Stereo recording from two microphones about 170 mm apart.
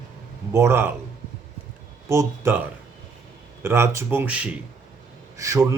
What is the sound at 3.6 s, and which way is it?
A man's voice, 15° right (ahead or behind).